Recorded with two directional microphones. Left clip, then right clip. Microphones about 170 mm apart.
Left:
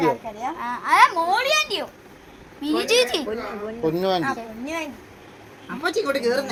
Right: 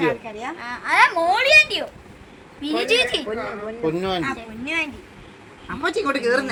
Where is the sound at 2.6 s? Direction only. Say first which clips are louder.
Even; 90° left.